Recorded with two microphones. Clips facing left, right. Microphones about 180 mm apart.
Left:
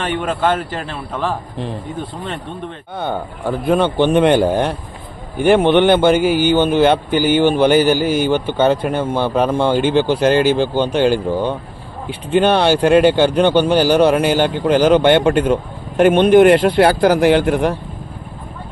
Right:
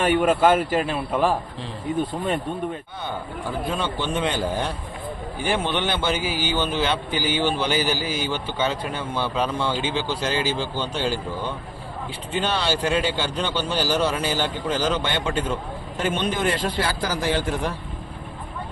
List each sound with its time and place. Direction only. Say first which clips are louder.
0.0 s a man's voice: right 1 dB; 10° right (ahead or behind)
2.9 s speech: left 8 dB; 55° left (ahead or behind)